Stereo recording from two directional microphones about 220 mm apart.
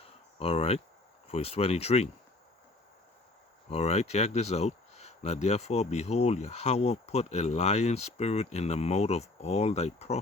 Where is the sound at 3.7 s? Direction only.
30° left (ahead or behind).